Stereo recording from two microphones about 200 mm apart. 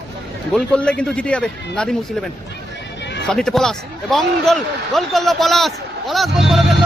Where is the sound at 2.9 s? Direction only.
60° left (ahead or behind).